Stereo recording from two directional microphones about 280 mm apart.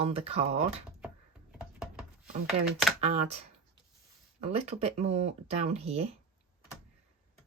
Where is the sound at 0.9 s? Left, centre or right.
Centre.